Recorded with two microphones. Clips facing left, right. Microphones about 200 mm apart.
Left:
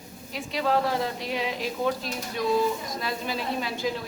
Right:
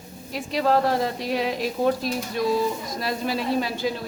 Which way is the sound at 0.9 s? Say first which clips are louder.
Right 4 dB; 40° right (ahead or behind).